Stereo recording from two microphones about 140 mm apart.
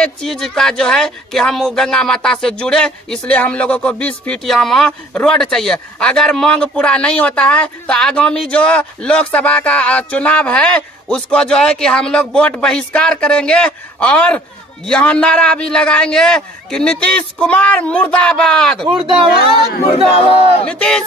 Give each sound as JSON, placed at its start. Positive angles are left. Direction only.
{"t": 0.0, "sound": "speech", "side_deg": 5}
{"t": 20.6, "sound": "speech", "side_deg": 5}